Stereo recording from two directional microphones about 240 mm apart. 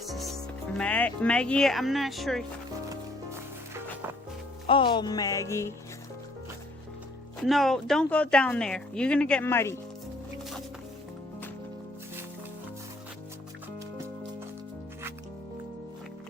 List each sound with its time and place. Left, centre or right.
0.0 s speech: centre
4.6 s speech: left
7.4 s a woman's voice: centre